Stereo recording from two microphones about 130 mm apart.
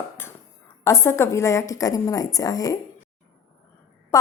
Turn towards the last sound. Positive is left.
turn(degrees=20)  # may be behind; listen again after turning